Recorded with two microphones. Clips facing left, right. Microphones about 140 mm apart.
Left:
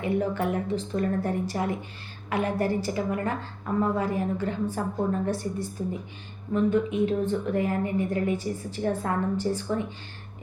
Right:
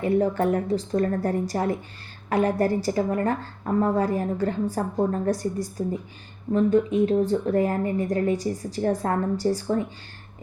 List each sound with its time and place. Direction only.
0.0 s a woman's voice: 40° right (ahead or behind)